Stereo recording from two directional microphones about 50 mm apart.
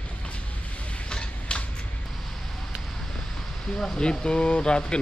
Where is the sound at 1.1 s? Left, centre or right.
Centre.